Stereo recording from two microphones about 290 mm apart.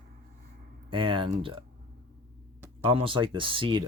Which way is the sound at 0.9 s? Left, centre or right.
Centre.